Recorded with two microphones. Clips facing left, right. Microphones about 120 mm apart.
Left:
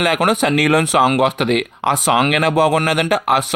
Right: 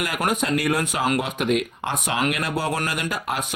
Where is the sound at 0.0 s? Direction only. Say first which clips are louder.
Left 8 dB; 85° left.